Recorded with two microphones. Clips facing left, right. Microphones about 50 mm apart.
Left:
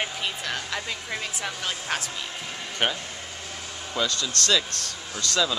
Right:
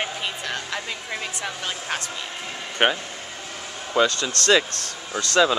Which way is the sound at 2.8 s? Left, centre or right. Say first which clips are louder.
Right 6 dB; right.